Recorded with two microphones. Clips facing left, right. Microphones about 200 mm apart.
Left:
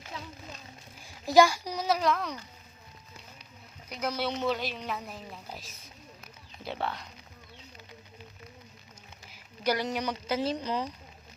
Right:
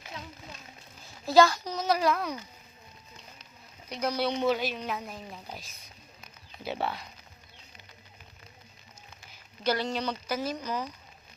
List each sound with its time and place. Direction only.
1.0 s speech: 15° left (ahead or behind)
1.9 s speech: 5° right (ahead or behind)
3.8 s speech: centre (ahead or behind)
9.3 s speech: 15° left (ahead or behind)